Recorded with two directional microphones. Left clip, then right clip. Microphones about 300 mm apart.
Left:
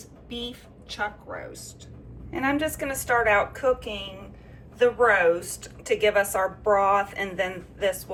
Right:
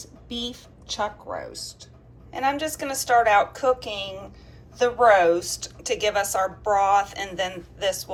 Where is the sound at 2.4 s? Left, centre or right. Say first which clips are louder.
Right 1 dB; centre.